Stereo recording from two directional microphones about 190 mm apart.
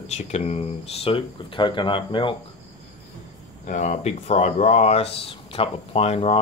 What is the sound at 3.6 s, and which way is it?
Speech, 40° left (ahead or behind).